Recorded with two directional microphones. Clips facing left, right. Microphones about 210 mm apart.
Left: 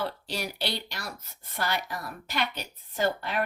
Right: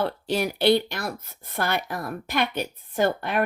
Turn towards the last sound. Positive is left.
turn(degrees=-55)  # may be behind; listen again after turning